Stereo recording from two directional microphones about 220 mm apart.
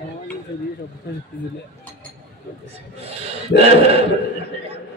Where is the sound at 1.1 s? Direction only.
50° left (ahead or behind).